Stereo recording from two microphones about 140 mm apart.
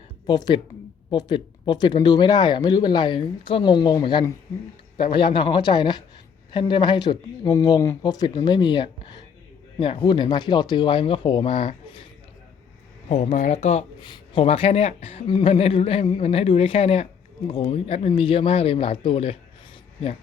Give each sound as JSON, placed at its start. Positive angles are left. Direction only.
{"t": 0.3, "sound": "speech", "side_deg": 30}
{"t": 13.1, "sound": "a woman's voice", "side_deg": 50}
{"t": 14.0, "sound": "a woman's voice", "side_deg": 40}